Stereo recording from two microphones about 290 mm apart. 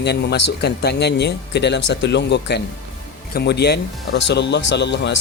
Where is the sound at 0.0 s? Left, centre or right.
Left.